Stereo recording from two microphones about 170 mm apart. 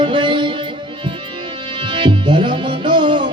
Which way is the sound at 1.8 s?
30° right (ahead or behind).